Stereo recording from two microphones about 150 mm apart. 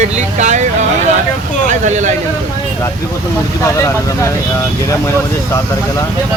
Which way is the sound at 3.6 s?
20° left (ahead or behind).